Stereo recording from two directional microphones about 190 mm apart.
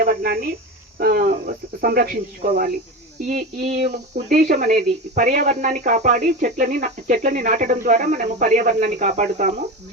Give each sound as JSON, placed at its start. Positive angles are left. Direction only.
{"t": 0.0, "sound": "speech", "side_deg": -55}